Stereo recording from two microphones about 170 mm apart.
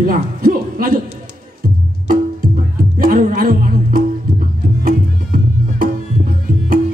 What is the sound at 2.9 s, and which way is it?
Music, 55° right (ahead or behind).